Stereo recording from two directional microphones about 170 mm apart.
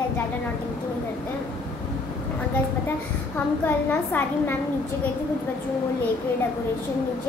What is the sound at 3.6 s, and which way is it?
Speech, 10° left (ahead or behind).